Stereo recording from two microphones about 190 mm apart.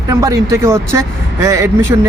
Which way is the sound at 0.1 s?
15° right (ahead or behind).